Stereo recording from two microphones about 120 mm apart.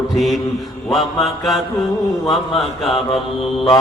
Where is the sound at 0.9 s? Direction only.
Centre (ahead or behind).